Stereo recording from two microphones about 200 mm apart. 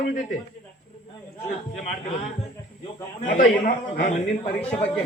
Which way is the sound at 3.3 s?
40° left (ahead or behind).